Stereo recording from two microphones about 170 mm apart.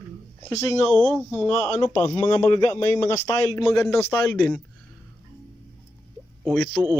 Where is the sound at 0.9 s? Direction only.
5° left (ahead or behind).